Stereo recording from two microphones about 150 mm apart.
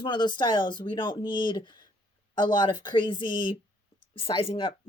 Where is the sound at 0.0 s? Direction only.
30° left (ahead or behind).